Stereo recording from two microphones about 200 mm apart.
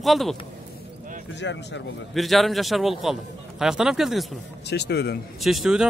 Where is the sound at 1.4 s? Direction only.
60° left (ahead or behind).